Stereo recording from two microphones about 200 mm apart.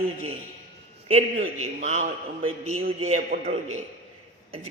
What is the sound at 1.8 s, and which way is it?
A man's voice, 35° right (ahead or behind).